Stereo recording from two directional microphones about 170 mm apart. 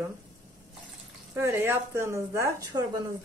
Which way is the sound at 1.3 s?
15° right (ahead or behind).